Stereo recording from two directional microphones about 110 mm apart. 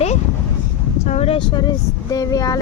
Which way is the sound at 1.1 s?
70° left (ahead or behind).